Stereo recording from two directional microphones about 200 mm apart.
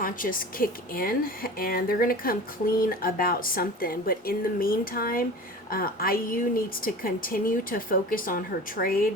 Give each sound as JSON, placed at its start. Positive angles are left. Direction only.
{"t": 0.0, "sound": "a woman's voice", "side_deg": 45}